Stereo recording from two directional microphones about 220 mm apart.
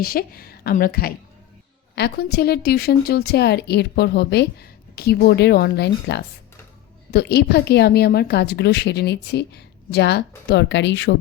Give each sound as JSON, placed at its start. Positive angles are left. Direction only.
{"t": 0.0, "sound": "a woman's voice", "side_deg": 40}